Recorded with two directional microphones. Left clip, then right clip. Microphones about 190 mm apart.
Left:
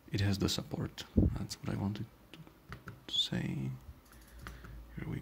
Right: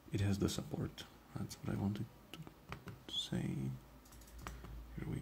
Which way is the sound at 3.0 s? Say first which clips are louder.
Left 8 dB; 15° left (ahead or behind).